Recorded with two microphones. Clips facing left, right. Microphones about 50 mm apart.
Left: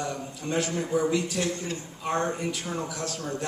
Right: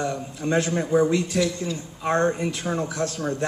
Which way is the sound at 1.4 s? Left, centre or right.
Left.